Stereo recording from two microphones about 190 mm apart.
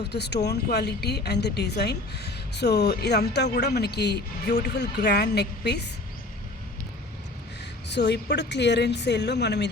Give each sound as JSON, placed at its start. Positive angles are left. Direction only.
{"t": 0.0, "sound": "a woman's voice", "side_deg": 60}
{"t": 7.9, "sound": "a woman's voice", "side_deg": 65}